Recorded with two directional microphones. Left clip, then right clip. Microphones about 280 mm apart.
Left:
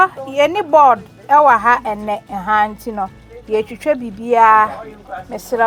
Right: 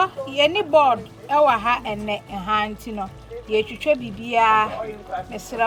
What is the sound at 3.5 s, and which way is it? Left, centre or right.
Speech, left.